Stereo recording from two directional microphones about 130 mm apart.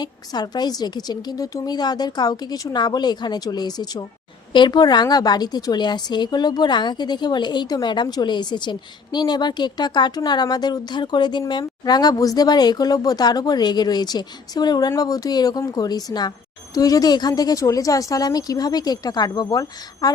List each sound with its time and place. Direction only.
0.0 s a woman's voice: 35° left (ahead or behind)